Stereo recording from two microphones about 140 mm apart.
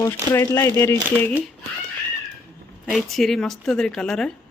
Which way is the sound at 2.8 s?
Centre (ahead or behind).